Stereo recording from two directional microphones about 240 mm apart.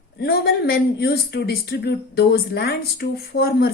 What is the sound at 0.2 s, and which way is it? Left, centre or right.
Speech, left.